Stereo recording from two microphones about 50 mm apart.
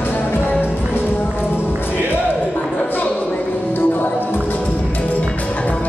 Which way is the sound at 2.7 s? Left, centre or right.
Left.